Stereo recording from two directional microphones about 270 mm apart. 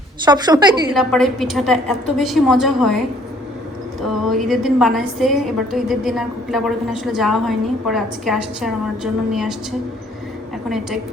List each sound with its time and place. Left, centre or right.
0.3 s a woman's voice: centre
0.9 s a woman's voice: centre
4.0 s a woman's voice: centre
10.7 s a woman's voice: centre